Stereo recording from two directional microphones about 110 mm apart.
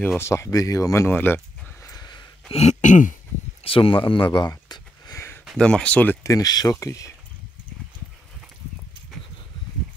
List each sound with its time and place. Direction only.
0.2 s speech: 25° left (ahead or behind)
2.0 s a sound: 40° left (ahead or behind)
2.5 s throat clearing: 80° left
3.6 s speech: 55° left (ahead or behind); by 5.1 s 40° left (ahead or behind)
5.1 s a sound: 25° left (ahead or behind)
5.6 s speech: 10° left (ahead or behind)
6.2 s speech: 35° left (ahead or behind)